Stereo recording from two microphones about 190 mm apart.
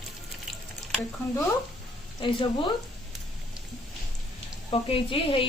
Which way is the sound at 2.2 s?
25° left (ahead or behind).